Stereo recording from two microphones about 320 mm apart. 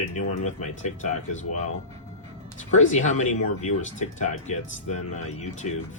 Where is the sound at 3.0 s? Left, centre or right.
Left.